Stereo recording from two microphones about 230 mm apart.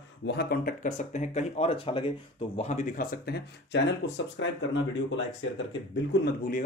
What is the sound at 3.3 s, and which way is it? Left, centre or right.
Speech, left.